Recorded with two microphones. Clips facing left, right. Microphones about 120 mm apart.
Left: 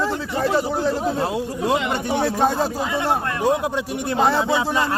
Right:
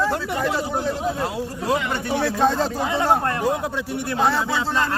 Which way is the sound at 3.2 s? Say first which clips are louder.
Right 2 dB; 35° right (ahead or behind).